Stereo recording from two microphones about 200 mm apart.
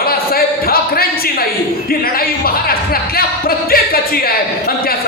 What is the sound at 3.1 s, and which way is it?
Music, 50° left (ahead or behind).